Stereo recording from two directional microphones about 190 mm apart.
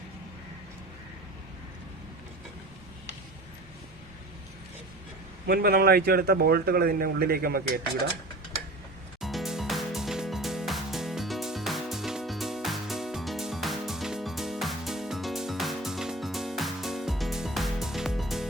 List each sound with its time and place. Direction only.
5.5 s a man's voice: 55° right (ahead or behind)
9.2 s music: centre (ahead or behind)